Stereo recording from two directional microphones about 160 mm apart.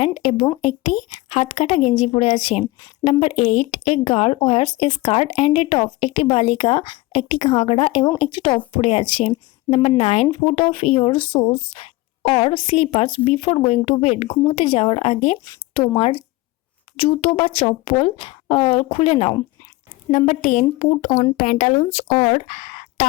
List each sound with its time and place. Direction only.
0.0 s speech: 40° left (ahead or behind)